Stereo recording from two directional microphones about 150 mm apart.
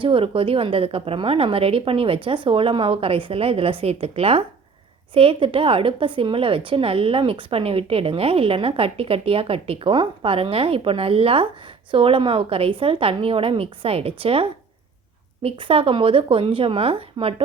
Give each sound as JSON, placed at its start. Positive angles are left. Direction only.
{"t": 0.0, "sound": "speech", "side_deg": -35}
{"t": 15.4, "sound": "speech", "side_deg": -35}